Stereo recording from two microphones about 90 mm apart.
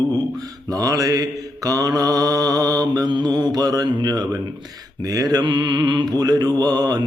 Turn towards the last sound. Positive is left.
turn(degrees=-45)  # may be behind; listen again after turning